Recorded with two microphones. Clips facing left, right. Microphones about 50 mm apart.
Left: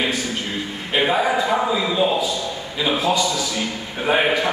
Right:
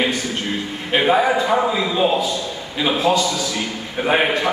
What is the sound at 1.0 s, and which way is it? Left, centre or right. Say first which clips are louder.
A man's voice: right 3 dB; centre.